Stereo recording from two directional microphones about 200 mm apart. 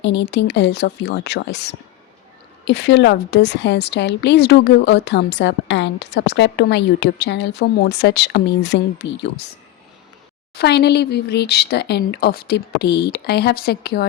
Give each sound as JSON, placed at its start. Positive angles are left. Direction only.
{"t": 0.0, "sound": "a woman's voice", "side_deg": 60}
{"t": 10.6, "sound": "speech", "side_deg": 55}